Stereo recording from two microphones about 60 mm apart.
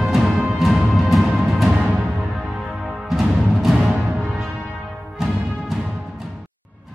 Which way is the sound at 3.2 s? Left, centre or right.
Centre.